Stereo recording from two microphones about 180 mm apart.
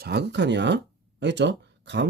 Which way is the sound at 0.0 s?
65° right (ahead or behind).